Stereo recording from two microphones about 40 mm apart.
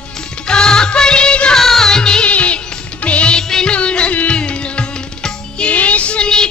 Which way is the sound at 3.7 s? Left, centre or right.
Left.